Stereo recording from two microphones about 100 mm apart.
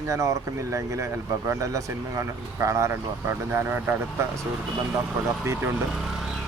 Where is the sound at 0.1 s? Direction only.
30° right (ahead or behind).